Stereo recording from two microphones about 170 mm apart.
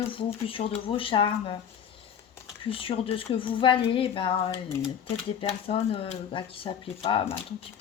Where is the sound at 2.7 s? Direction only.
30° left (ahead or behind).